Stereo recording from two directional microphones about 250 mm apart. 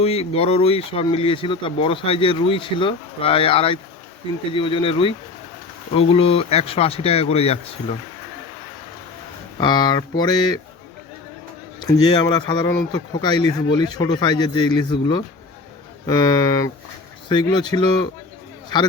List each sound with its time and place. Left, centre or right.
0.0 s speech: left
9.6 s speech: centre
11.8 s speech: centre